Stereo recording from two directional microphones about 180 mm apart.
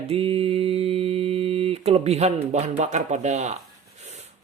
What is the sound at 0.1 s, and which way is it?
Mantra, 30° right (ahead or behind).